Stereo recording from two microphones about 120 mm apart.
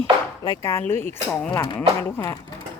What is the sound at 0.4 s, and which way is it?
Speech, 25° left (ahead or behind).